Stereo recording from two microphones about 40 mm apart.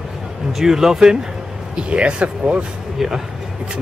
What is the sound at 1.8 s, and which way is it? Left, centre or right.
Speech, right.